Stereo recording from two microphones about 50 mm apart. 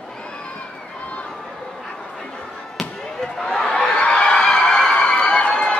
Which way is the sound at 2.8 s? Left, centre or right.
Centre.